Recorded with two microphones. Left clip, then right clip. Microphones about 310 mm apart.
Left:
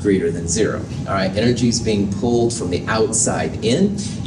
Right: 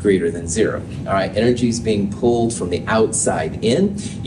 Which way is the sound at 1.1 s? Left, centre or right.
Right.